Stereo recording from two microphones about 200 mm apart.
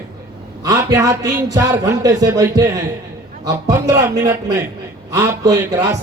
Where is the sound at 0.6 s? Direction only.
15° right (ahead or behind).